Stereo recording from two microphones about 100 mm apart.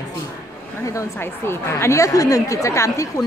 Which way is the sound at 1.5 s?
25° left (ahead or behind).